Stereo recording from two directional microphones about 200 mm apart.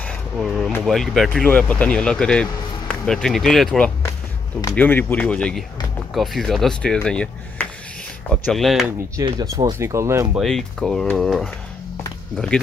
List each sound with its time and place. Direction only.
0.4 s speech: centre (ahead or behind)
4.6 s speech: 15° left (ahead or behind)
9.1 s speech: 20° right (ahead or behind)
10.3 s speech: centre (ahead or behind)